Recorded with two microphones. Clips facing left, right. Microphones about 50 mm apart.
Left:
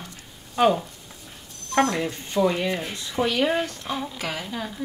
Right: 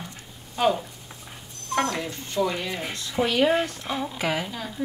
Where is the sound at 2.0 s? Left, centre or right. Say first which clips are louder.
Left 3 dB; left.